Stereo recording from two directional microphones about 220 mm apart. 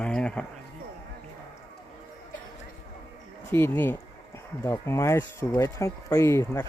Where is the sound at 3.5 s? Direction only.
10° left (ahead or behind).